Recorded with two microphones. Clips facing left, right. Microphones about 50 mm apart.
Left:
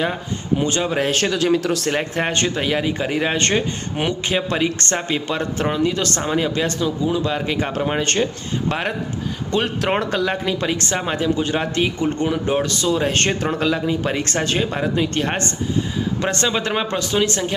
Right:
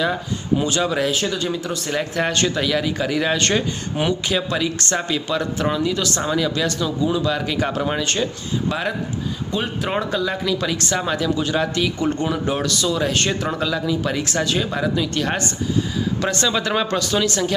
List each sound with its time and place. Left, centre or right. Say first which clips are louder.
0.6 s speech: left 1 dB; left
1.1 s speech: left 5 dB; left
2.1 s speech: even; left
9.5 s speech: left 4 dB; left
10.4 s speech: even; left